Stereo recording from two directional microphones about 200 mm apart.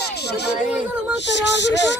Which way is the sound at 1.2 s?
60° left (ahead or behind).